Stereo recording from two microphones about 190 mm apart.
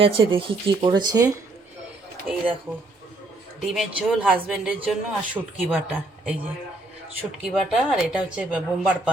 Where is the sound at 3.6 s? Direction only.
Centre (ahead or behind).